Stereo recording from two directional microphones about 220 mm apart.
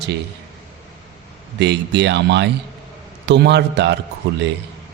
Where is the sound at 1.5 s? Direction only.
50° right (ahead or behind).